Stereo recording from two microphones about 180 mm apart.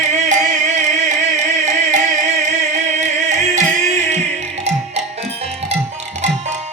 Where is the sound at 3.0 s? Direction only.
45° right (ahead or behind).